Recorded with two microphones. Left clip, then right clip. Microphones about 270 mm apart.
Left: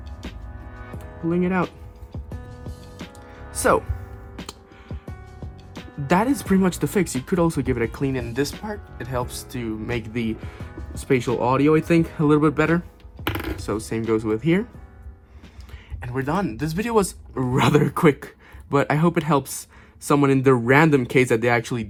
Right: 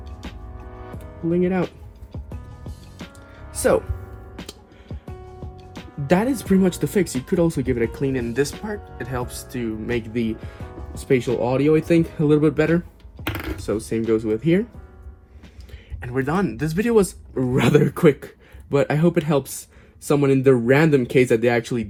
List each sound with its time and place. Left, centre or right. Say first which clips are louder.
0.2 s music: even; centre
1.3 s speech: right 1 dB; left
2.1 s music: left 1 dB; centre
3.6 s speech: even; left
4.4 s music: left 1 dB; centre
6.1 s speech: even; left
13.2 s music: left 2 dB; centre
13.7 s speech: right 3 dB; left
16.0 s speech: right 2 dB; centre